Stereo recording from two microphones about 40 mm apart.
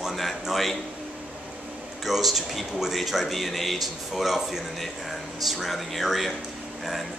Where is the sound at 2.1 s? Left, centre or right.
Centre.